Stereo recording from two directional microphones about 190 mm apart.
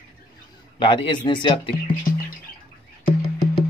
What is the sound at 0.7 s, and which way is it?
Speech, 25° left (ahead or behind).